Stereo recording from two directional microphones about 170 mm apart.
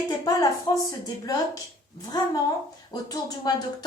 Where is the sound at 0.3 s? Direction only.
20° left (ahead or behind).